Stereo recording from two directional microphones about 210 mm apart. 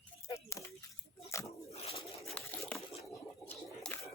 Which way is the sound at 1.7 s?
30° left (ahead or behind).